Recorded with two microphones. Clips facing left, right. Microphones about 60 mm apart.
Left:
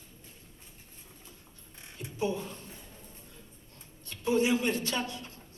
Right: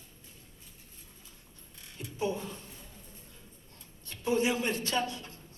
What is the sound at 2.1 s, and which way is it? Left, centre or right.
Speech, right.